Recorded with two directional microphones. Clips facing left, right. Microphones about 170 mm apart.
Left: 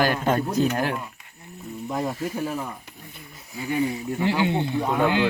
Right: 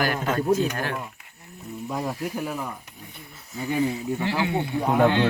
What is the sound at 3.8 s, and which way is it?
Speech, 20° left (ahead or behind).